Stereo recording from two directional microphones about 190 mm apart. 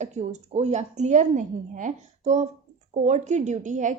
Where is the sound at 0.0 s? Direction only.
40° right (ahead or behind).